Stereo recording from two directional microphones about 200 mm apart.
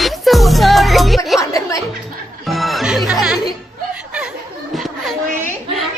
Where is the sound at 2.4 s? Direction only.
Centre (ahead or behind).